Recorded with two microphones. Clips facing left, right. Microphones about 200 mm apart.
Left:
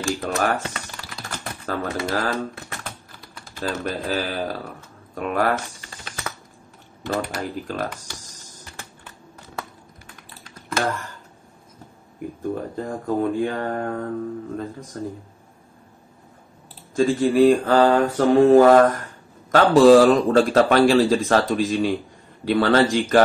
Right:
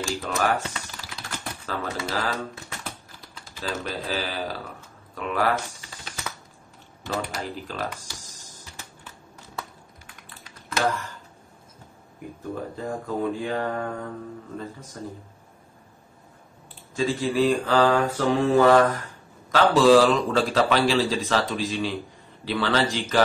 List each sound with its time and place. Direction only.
0.0 s speech: 55° left (ahead or behind)
5.1 s typing: 50° left (ahead or behind)
7.0 s speech: 55° left (ahead or behind)
12.7 s speech: 50° left (ahead or behind)
16.9 s speech: 50° left (ahead or behind)